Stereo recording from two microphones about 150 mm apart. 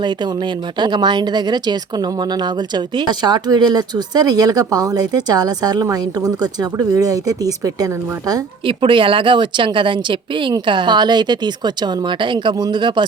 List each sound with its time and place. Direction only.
0.0 s speech: 30° right (ahead or behind)
8.6 s speech: 35° right (ahead or behind)